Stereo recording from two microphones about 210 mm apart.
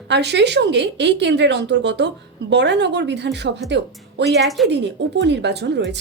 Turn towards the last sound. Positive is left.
turn(degrees=-55)  # may be behind; listen again after turning